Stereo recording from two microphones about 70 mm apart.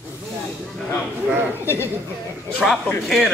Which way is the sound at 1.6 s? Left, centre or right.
Left.